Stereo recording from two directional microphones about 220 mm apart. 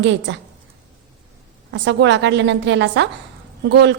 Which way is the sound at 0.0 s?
55° right (ahead or behind).